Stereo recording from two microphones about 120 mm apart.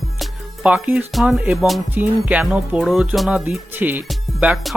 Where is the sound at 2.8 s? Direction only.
Centre (ahead or behind).